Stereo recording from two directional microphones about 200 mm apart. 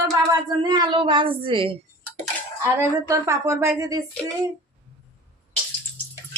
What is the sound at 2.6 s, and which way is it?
Speech, 15° right (ahead or behind).